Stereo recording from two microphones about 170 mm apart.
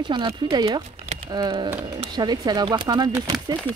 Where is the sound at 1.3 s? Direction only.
25° right (ahead or behind).